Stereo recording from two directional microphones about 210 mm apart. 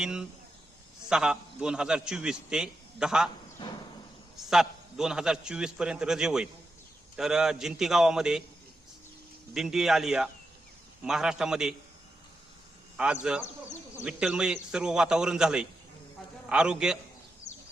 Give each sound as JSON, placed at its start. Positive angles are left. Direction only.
{"t": 0.0, "sound": "a man's voice", "side_deg": -5}
{"t": 3.6, "sound": "a sound", "side_deg": 20}
{"t": 4.4, "sound": "a man's voice", "side_deg": 0}
{"t": 9.6, "sound": "a man's voice", "side_deg": 0}
{"t": 13.0, "sound": "a man's voice", "side_deg": -5}
{"t": 17.5, "sound": "bird", "side_deg": 35}